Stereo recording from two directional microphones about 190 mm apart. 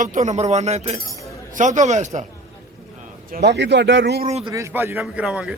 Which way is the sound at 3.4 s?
70° right (ahead or behind).